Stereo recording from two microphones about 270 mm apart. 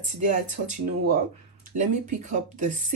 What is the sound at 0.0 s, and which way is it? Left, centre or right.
Speech, right.